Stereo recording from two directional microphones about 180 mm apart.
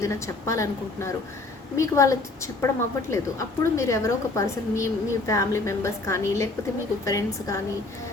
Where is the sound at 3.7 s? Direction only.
15° left (ahead or behind).